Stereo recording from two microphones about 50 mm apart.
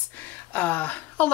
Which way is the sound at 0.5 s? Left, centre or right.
Left.